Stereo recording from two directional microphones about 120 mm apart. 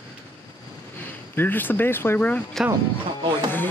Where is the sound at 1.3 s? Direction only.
15° left (ahead or behind).